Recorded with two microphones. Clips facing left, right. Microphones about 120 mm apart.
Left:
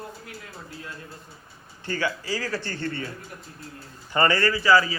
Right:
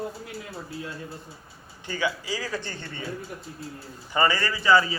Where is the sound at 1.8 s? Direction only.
15° right (ahead or behind).